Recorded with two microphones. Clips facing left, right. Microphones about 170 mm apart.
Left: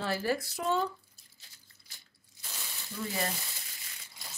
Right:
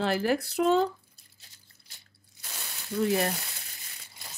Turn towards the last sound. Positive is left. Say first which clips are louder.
# right 9 dB
turn(degrees=-65)  # may be behind; listen again after turning